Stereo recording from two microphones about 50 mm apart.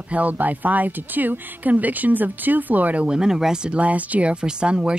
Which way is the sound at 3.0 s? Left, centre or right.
Centre.